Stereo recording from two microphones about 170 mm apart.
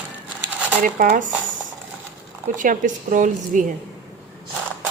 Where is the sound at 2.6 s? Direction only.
50° right (ahead or behind).